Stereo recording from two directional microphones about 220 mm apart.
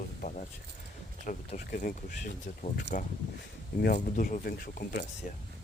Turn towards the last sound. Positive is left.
turn(degrees=40)  # may be behind; listen again after turning